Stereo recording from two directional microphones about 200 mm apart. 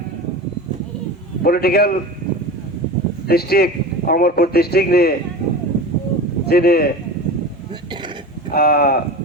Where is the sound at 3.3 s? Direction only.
50° left (ahead or behind).